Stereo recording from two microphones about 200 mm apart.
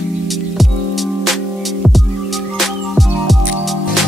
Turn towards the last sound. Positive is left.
turn(degrees=0)  # may be behind; listen again after turning